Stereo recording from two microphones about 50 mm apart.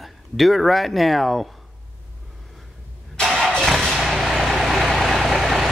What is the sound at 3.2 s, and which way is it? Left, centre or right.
Vehicle, centre.